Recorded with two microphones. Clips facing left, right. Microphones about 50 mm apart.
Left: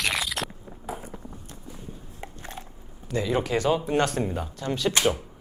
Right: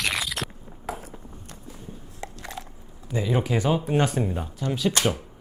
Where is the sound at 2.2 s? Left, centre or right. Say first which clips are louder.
Right 3 dB; right.